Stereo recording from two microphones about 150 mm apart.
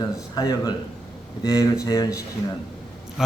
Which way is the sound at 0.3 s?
25° left (ahead or behind).